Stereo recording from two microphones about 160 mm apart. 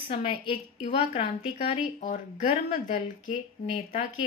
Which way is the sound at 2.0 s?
50° left (ahead or behind).